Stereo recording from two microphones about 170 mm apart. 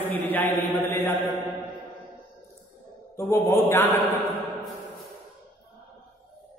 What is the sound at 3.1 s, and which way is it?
Speech, 15° left (ahead or behind).